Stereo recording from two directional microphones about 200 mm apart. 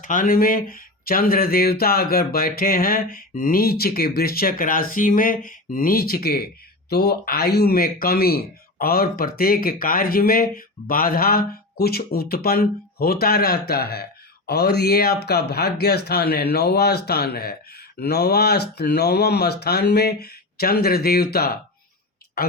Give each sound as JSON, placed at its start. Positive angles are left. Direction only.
{"t": 0.0, "sound": "speech", "side_deg": 40}